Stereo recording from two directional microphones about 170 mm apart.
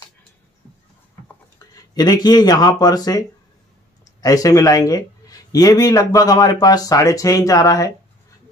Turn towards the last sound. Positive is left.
turn(degrees=20)  # may be behind; listen again after turning